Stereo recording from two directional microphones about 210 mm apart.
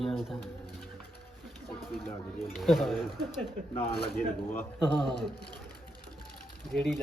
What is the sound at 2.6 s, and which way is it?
Speech, centre (ahead or behind).